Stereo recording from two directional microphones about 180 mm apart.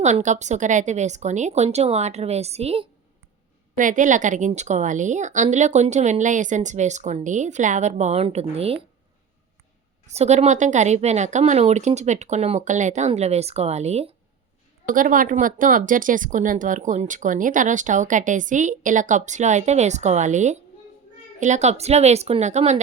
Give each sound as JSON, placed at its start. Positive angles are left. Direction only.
{"t": 0.0, "sound": "a woman's voice", "side_deg": -40}
{"t": 3.8, "sound": "a woman's voice", "side_deg": -45}
{"t": 10.1, "sound": "a woman's voice", "side_deg": -40}
{"t": 14.8, "sound": "a woman's voice", "side_deg": -45}